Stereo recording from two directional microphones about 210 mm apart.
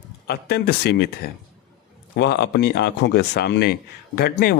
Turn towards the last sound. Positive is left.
turn(degrees=50)  # may be behind; listen again after turning